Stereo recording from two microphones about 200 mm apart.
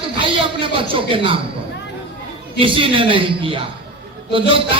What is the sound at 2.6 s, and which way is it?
A man's voice, 25° right (ahead or behind).